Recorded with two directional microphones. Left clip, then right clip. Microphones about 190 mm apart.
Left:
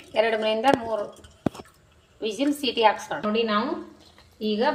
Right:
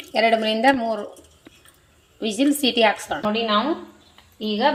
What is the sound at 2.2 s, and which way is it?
A woman's voice, 45° right (ahead or behind).